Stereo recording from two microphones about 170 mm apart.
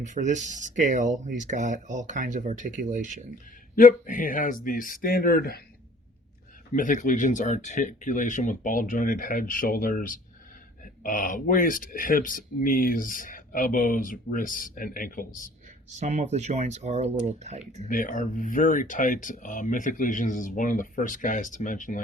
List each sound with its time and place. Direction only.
0.0 s speech: 45° right (ahead or behind)
3.8 s speech: 50° left (ahead or behind)
6.7 s speech: 50° left (ahead or behind)
16.0 s speech: 40° right (ahead or behind)
17.8 s speech: 50° left (ahead or behind)